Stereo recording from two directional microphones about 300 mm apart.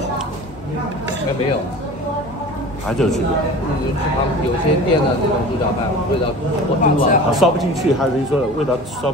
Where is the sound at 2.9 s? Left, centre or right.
Centre.